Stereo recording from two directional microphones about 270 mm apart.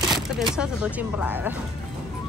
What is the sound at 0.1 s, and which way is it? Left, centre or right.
Speech, centre.